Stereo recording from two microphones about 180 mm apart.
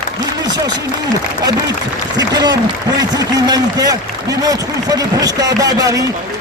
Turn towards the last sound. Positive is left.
turn(degrees=-20)  # may be behind; listen again after turning